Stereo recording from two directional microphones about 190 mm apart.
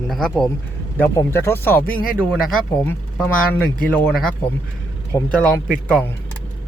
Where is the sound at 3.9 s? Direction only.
10° left (ahead or behind).